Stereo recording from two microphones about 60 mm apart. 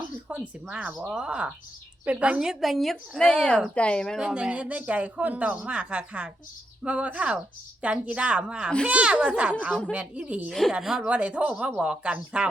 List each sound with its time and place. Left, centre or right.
0.3 s speech: centre
2.5 s speech: centre
4.2 s speech: centre
10.7 s speech: centre
11.0 s speech: centre